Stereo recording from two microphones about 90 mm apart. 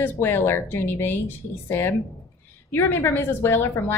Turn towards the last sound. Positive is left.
turn(degrees=25)  # may be behind; listen again after turning